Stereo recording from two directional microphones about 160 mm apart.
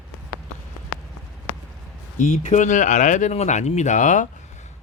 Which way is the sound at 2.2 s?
45° left (ahead or behind).